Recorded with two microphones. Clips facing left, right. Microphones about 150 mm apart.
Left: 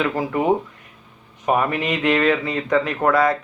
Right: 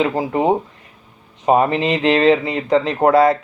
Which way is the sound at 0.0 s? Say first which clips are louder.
Right 3 dB; 30° right (ahead or behind).